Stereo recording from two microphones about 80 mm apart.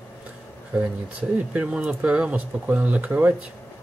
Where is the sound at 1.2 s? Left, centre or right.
Centre.